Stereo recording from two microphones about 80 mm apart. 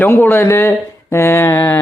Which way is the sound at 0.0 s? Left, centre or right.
Left.